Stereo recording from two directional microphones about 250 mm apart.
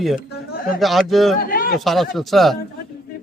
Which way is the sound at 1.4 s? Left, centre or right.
Left.